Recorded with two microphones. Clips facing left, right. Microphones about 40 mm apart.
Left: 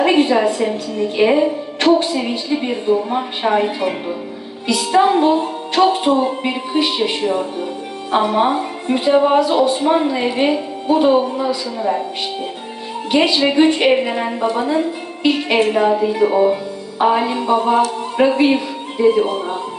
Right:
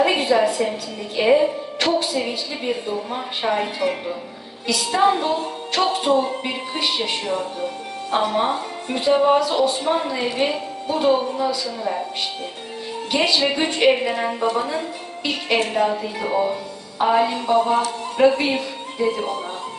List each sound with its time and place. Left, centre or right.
0.0 s a sound: left
1.8 s speech: left
4.6 s music: left
5.8 s speech: centre
13.1 s a woman's voice: centre